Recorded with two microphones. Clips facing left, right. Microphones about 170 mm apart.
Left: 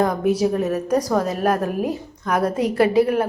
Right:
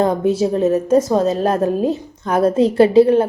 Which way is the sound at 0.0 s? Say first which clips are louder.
Right 3 dB; 25° right (ahead or behind).